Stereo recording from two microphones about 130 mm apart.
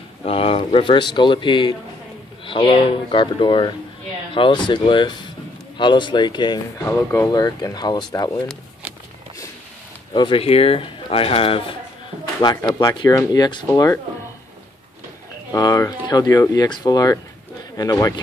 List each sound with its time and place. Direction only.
0.2 s speech: 45° left (ahead or behind); by 7.2 s 20° left (ahead or behind)
7.2 s speech: 30° left (ahead or behind)
10.1 s speech: 40° left (ahead or behind)
12.4 s speech: 35° left (ahead or behind)
15.5 s speech: 30° left (ahead or behind)